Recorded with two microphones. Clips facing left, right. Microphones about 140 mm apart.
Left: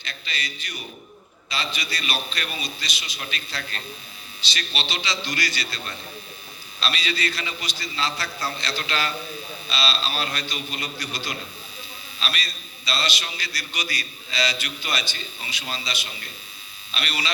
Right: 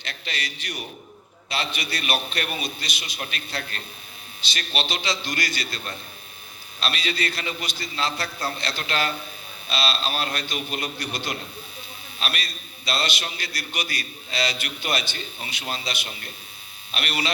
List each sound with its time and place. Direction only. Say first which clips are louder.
0.0 s a man's voice: right 1 dB; 75° right (ahead or behind)
1.5 s a man's voice: right 1 dB; 60° right (ahead or behind)